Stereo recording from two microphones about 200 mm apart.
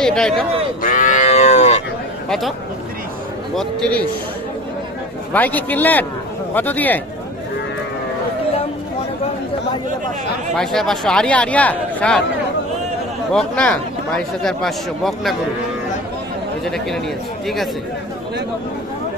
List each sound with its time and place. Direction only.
0.0 s a man's voice: 5° left (ahead or behind)
0.8 s livestock: 40° left (ahead or behind)
2.2 s speech: centre (ahead or behind)
3.5 s a man's voice: 5° left (ahead or behind)
5.3 s a man's voice: 10° left (ahead or behind)
10.6 s a man's voice: centre (ahead or behind)
13.3 s a man's voice: 5° left (ahead or behind)
16.6 s a man's voice: centre (ahead or behind)